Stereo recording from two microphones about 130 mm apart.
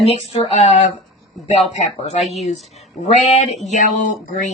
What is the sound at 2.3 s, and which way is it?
A woman's voice, 55° left (ahead or behind).